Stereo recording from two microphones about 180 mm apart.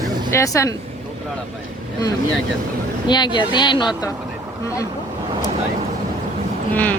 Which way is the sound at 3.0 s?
25° left (ahead or behind).